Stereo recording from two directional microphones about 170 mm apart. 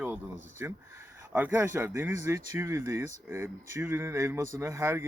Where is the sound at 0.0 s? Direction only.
10° right (ahead or behind).